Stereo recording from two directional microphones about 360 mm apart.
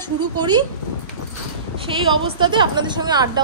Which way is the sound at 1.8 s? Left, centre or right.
Centre.